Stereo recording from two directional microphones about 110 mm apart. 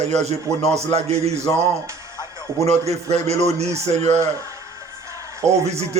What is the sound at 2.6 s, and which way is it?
Speech, 80° right.